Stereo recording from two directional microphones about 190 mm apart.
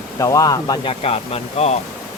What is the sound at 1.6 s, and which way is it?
Speech, 35° left (ahead or behind).